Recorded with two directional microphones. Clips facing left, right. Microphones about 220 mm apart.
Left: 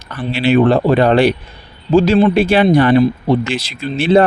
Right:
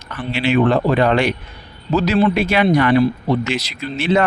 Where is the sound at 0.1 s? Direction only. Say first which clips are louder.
Left 4 dB; 35° left (ahead or behind).